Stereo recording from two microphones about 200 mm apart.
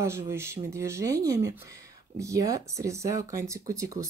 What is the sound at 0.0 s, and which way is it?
Speech, 15° right (ahead or behind).